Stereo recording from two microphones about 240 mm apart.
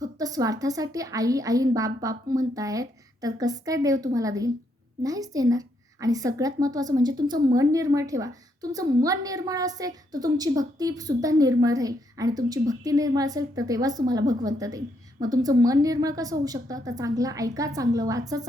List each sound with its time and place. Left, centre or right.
0.0 s a woman's voice: centre